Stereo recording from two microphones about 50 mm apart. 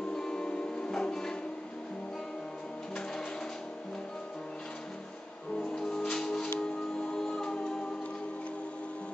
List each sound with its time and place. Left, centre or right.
0.1 s music: centre
5.6 s music: centre